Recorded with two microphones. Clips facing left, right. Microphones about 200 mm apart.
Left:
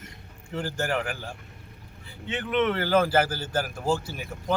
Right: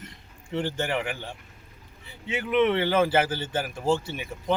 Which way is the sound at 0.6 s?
Centre (ahead or behind).